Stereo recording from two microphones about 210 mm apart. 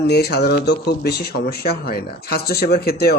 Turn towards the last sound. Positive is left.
turn(degrees=50)  # may be behind; listen again after turning